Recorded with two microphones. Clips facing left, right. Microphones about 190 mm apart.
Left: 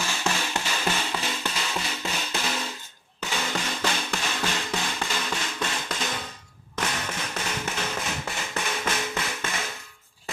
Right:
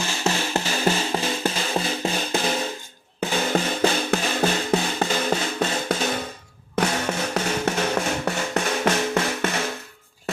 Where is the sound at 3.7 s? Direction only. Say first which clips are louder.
Right 8 dB; 55° right (ahead or behind).